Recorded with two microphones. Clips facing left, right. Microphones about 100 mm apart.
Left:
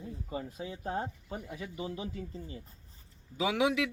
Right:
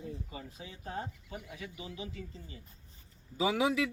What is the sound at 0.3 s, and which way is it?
Speech, 40° left (ahead or behind).